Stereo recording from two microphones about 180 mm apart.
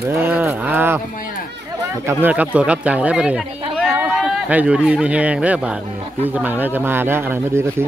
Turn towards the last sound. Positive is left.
turn(degrees=-15)  # may be behind; listen again after turning